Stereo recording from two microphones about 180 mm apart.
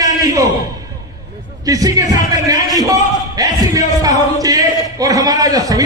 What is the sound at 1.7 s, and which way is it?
Speech, 20° right (ahead or behind).